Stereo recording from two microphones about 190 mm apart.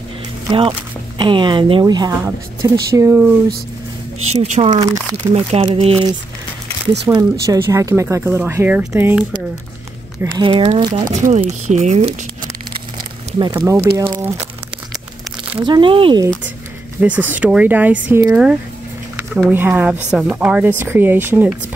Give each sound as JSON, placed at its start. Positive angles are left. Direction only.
{"t": 0.5, "sound": "speech", "side_deg": -25}
{"t": 4.4, "sound": "speech", "side_deg": -35}
{"t": 4.7, "sound": "speech", "side_deg": -20}
{"t": 5.3, "sound": "speech", "side_deg": -30}
{"t": 7.1, "sound": "speech", "side_deg": -20}
{"t": 10.3, "sound": "speech", "side_deg": -25}
{"t": 11.2, "sound": "speech", "side_deg": -40}
{"t": 13.4, "sound": "speech", "side_deg": -15}
{"t": 15.6, "sound": "speech", "side_deg": -25}
{"t": 17.0, "sound": "speech", "side_deg": -10}